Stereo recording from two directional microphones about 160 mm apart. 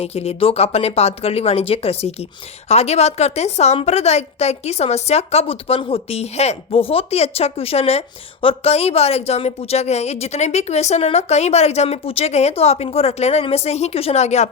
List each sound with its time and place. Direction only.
0.0 s a woman's voice: 40° left (ahead or behind)